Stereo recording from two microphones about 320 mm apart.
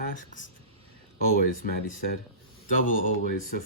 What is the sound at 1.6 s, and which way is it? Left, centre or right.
Speech, left.